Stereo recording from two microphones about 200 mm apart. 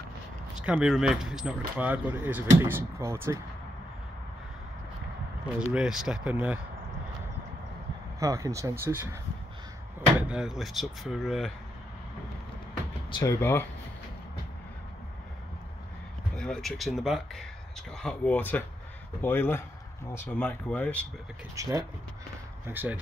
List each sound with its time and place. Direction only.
0.6 s speech: 5° right (ahead or behind)
5.7 s speech: 5° right (ahead or behind)
8.2 s speech: 15° right (ahead or behind)
10.2 s speech: 5° right (ahead or behind)
13.1 s speech: 15° left (ahead or behind)
16.3 s speech: 5° left (ahead or behind)
21.5 s speech: 15° right (ahead or behind)